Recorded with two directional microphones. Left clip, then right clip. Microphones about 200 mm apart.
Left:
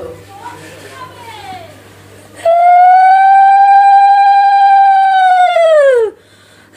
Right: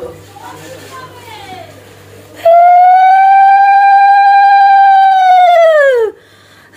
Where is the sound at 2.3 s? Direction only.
Centre (ahead or behind).